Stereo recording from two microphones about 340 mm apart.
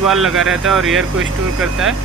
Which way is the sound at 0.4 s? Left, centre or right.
Centre.